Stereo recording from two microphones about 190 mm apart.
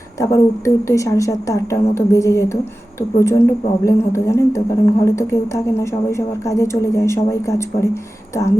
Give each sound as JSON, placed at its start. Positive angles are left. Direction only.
{"t": 0.2, "sound": "speech", "side_deg": 15}